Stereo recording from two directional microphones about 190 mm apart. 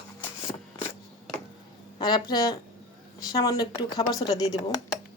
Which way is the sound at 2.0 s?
20° left (ahead or behind).